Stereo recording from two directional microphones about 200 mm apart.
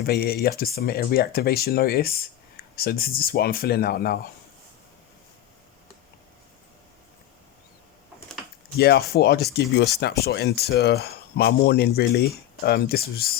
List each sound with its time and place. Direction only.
0.0 s speech: 50° left (ahead or behind)
8.8 s speech: 55° left (ahead or behind)